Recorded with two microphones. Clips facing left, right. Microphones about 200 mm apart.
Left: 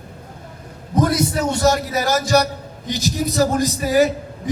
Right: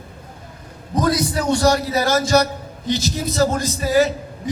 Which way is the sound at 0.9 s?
25° left (ahead or behind).